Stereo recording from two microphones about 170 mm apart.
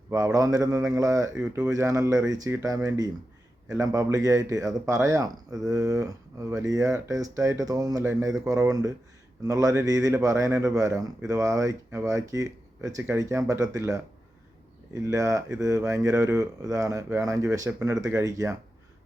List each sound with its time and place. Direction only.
0.1 s speech: 20° right (ahead or behind)